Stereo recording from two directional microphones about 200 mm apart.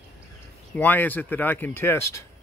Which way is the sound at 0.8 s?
10° left (ahead or behind).